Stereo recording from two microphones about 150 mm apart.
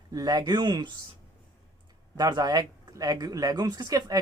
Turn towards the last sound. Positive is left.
turn(degrees=-25)  # may be behind; listen again after turning